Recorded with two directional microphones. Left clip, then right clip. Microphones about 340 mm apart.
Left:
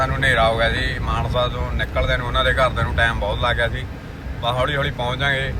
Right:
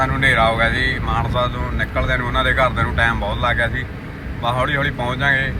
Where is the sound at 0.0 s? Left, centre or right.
Centre.